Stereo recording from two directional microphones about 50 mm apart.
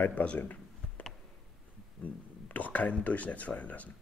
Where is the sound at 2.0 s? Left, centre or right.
Left.